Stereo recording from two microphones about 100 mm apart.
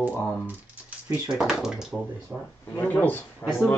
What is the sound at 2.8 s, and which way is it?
Speech, 20° left (ahead or behind).